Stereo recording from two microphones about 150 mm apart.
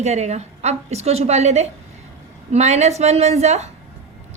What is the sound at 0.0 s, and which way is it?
A woman's voice, 50° right (ahead or behind).